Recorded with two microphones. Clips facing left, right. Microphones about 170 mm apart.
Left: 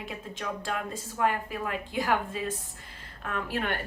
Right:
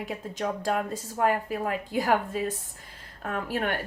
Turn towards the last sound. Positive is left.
turn(degrees=-40)  # may be behind; listen again after turning